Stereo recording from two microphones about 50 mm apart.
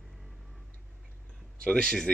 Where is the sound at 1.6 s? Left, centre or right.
Centre.